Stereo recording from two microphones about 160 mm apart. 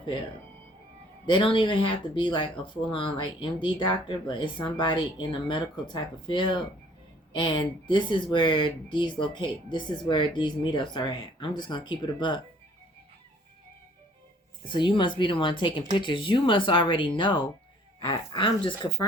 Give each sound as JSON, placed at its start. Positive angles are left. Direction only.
{"t": 1.3, "sound": "speech", "side_deg": 30}
{"t": 14.6, "sound": "speech", "side_deg": 30}